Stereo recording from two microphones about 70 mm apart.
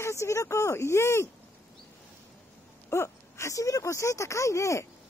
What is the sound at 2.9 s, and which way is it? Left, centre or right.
Speech, left.